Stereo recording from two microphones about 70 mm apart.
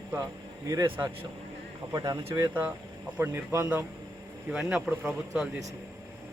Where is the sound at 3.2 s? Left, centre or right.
Right.